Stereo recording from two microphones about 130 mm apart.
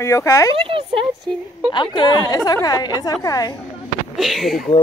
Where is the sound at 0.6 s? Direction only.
45° right (ahead or behind).